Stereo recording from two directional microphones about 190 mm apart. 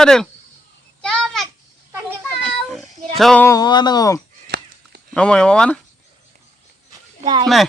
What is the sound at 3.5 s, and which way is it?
Speech, 20° left (ahead or behind).